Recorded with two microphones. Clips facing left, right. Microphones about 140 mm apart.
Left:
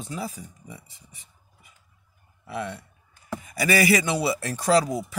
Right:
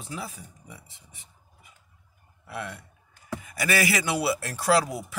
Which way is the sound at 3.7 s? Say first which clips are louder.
Left 4 dB; centre (ahead or behind).